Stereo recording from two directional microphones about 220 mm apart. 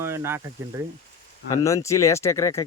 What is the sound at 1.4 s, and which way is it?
Speech, 15° left (ahead or behind).